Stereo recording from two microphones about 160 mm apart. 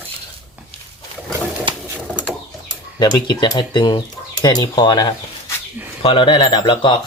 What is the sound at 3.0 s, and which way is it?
Speech, 25° left (ahead or behind).